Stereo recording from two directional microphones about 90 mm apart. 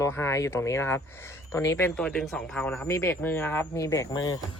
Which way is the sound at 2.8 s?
30° left (ahead or behind).